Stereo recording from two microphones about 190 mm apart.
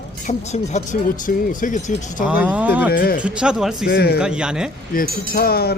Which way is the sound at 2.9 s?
55° left (ahead or behind).